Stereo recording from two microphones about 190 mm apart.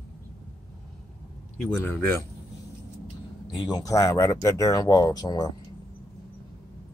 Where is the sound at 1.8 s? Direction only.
10° left (ahead or behind).